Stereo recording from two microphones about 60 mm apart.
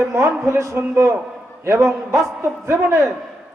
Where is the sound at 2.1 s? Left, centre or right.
Centre.